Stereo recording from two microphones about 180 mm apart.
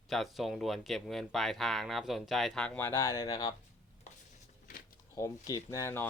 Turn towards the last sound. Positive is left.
turn(degrees=15)  # may be behind; listen again after turning